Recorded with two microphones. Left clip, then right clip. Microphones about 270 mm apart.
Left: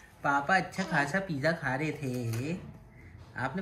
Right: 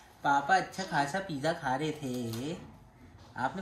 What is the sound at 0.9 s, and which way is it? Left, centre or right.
Speech, centre.